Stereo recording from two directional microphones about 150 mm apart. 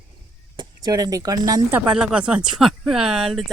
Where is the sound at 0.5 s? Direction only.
30° right (ahead or behind).